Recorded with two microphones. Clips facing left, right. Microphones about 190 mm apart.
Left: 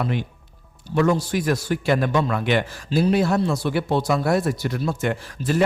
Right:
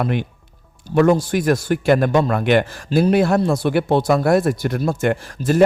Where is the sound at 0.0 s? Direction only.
60° right (ahead or behind).